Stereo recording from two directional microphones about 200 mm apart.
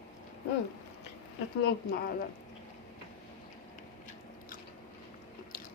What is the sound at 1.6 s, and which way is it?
Speech, 50° left (ahead or behind).